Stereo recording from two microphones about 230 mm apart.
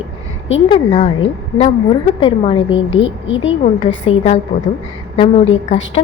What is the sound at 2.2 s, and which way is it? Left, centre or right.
Speech, left.